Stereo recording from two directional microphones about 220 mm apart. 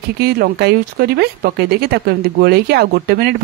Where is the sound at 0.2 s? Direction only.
45° right (ahead or behind).